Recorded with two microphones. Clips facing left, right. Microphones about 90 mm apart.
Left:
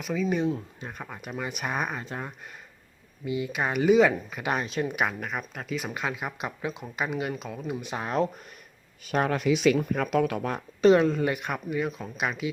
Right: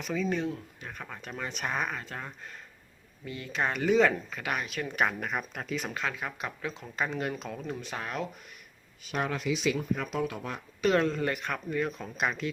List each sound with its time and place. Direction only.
0.0 s speech: 5° left (ahead or behind)
0.3 s speech: 20° left (ahead or behind)
4.5 s speech: 30° left (ahead or behind)
4.9 s speech: 5° left (ahead or behind)
5.9 s speech: 15° left (ahead or behind)
7.8 s speech: 20° left (ahead or behind)
9.0 s speech: 50° left (ahead or behind)
11.0 s speech: 5° left (ahead or behind)
11.3 s speech: 15° left (ahead or behind)
11.8 s speech: 5° left (ahead or behind)